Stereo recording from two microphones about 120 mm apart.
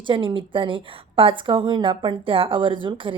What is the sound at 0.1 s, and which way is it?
A woman's voice, 45° right (ahead or behind).